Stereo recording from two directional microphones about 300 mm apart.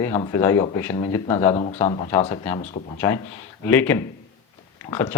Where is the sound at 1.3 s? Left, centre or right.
Centre.